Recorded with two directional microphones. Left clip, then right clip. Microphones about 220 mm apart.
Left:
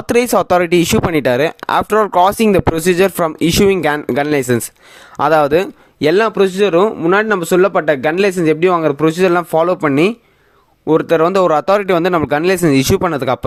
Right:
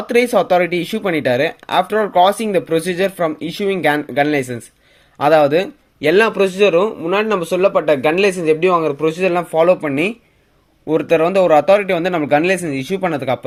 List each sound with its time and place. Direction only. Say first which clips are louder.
0.1 s a man's voice: left 1 dB; 50° left (ahead or behind)